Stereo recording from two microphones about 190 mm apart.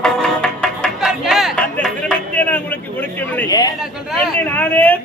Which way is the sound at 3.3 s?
20° left (ahead or behind).